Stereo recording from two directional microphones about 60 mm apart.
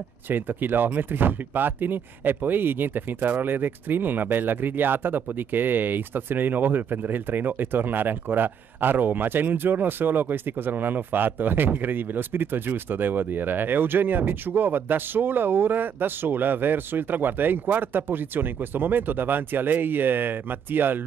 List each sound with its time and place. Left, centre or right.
0.3 s speech: right